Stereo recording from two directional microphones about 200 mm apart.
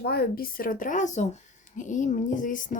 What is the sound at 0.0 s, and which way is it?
Speech, 50° left (ahead or behind).